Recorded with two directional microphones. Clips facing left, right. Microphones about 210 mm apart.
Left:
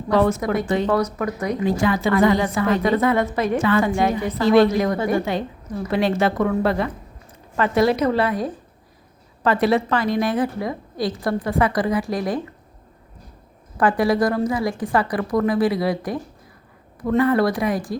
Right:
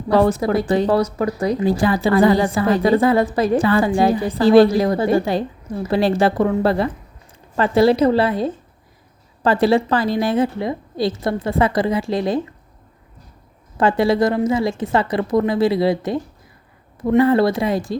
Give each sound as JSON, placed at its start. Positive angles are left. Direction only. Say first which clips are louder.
{"t": 0.1, "sound": "a woman's voice", "louder": "right 3 dB", "side_deg": -35}
{"t": 13.7, "sound": "a woman's voice", "louder": "right 2 dB", "side_deg": -25}